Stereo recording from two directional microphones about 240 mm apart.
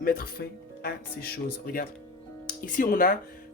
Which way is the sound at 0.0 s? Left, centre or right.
Left.